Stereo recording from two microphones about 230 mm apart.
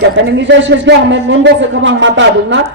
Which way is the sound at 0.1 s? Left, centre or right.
Right.